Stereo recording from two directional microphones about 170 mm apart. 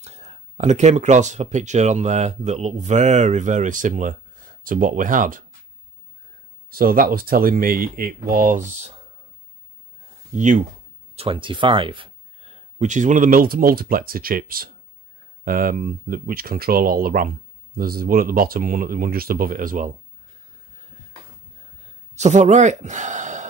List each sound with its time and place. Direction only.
0.0 s speech: 40° right (ahead or behind)
6.7 s speech: 60° right (ahead or behind)
10.3 s speech: 45° right (ahead or behind)
11.1 s speech: 30° right (ahead or behind); by 19.9 s 55° right (ahead or behind)
22.1 s speech: 45° right (ahead or behind)